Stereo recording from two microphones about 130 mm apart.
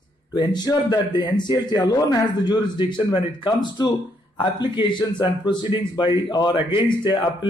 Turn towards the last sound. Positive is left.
turn(degrees=40)  # may be behind; listen again after turning